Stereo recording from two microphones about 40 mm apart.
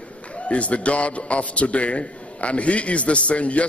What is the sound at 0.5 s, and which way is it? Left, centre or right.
A man's voice, left.